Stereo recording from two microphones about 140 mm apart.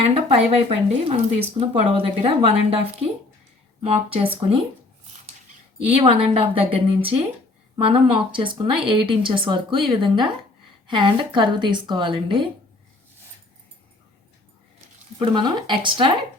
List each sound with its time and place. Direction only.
0.0 s speech: 40° right (ahead or behind)
6.0 s speech: 40° right (ahead or behind)
15.2 s speech: 35° right (ahead or behind)